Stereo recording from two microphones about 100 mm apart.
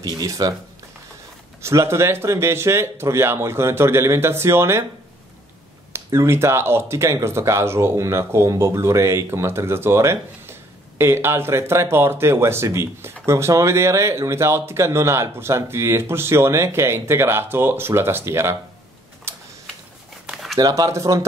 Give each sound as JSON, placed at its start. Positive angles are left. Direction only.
{"t": 0.0, "sound": "speech", "side_deg": -40}
{"t": 1.6, "sound": "speech", "side_deg": -30}
{"t": 6.0, "sound": "speech", "side_deg": -25}
{"t": 19.3, "sound": "typing", "side_deg": -30}
{"t": 20.5, "sound": "speech", "side_deg": -40}